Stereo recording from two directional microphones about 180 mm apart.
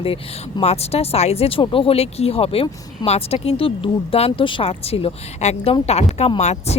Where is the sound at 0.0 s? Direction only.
30° left (ahead or behind).